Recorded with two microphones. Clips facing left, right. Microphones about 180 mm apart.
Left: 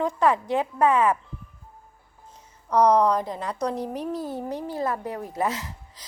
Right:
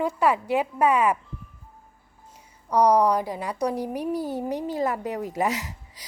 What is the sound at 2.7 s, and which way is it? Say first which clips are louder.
A woman's voice: even; 10° right (ahead or behind).